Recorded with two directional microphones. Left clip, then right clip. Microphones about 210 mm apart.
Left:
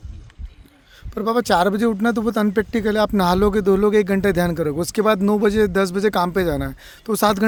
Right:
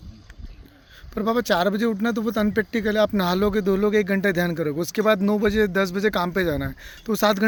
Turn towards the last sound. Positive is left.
turn(degrees=25)  # may be behind; listen again after turning